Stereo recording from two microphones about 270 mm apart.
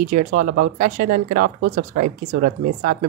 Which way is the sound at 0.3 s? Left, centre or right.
Right.